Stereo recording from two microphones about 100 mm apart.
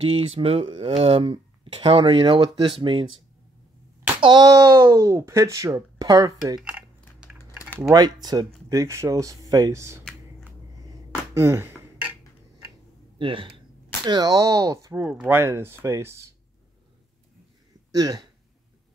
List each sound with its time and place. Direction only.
0.0 s speech: 75° right (ahead or behind); by 3.1 s 55° right (ahead or behind)
4.2 s a sound: 45° right (ahead or behind)
4.5 s speech: 30° right (ahead or behind)
6.6 s typing: 10° right (ahead or behind)
7.9 s speech: 40° right (ahead or behind)
8.6 s speech: 30° right (ahead or behind)
11.3 s a sound: 25° right (ahead or behind)
13.2 s speech: 60° right (ahead or behind)
14.0 s speech: 40° right (ahead or behind)
15.0 s speech: 10° right (ahead or behind)
15.3 s speech: 25° right (ahead or behind)
17.9 s speech: 45° right (ahead or behind)